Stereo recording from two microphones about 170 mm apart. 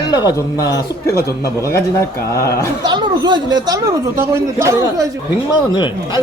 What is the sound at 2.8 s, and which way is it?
Speech, 25° right (ahead or behind).